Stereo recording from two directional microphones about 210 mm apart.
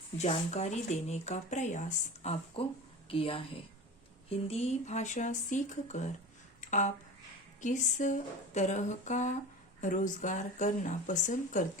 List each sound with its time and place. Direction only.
0.2 s a woman's voice: 30° left (ahead or behind)
6.6 s a sound: 35° left (ahead or behind)
7.6 s speech: 35° left (ahead or behind)